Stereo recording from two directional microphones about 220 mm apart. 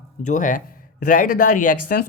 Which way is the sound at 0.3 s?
35° left (ahead or behind).